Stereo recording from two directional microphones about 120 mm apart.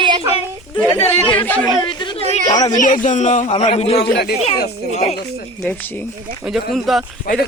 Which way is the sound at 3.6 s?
65° left (ahead or behind).